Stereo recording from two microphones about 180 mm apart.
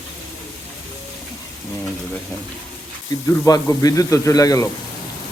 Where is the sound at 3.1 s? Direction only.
20° left (ahead or behind).